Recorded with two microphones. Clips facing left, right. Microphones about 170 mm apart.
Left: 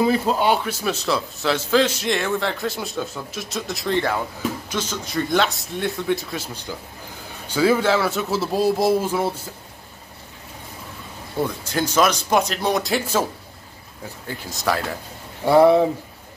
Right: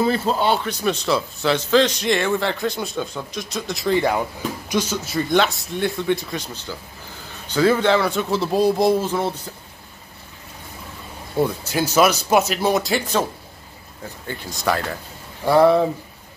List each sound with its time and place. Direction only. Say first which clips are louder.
0.0 s a man's voice: left 1 dB; 10° left (ahead or behind)
4.6 s a man's voice: right 4 dB; 10° right (ahead or behind); by 9.4 s 10° left (ahead or behind)
11.4 s a man's voice: right 1 dB; 10° right (ahead or behind)
15.5 s speech: left 1 dB; 20° left (ahead or behind)